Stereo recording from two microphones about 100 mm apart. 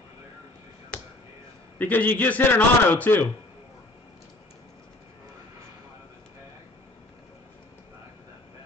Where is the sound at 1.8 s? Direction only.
15° left (ahead or behind).